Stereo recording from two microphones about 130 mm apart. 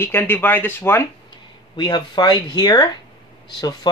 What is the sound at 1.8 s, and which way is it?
Speech, 35° left (ahead or behind).